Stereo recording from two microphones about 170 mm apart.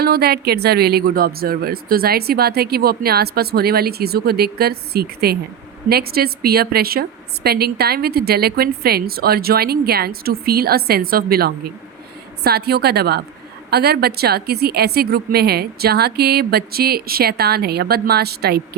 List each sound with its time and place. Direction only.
0.0 s a woman's voice: 65° right (ahead or behind)